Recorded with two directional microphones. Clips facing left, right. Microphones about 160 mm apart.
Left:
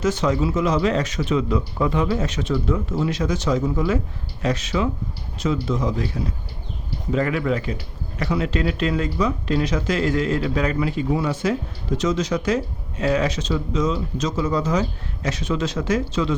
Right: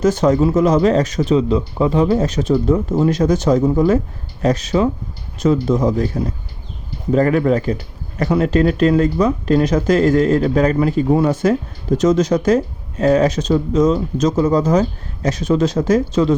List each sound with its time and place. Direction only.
0.0 s speech: 45° right (ahead or behind)